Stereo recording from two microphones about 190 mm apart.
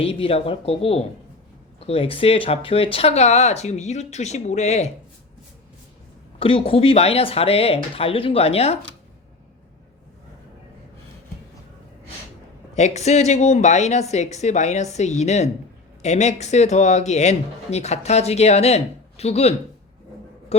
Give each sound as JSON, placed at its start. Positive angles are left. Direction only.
{"t": 0.0, "sound": "speech", "side_deg": 30}
{"t": 6.4, "sound": "speech", "side_deg": 30}
{"t": 12.7, "sound": "speech", "side_deg": 35}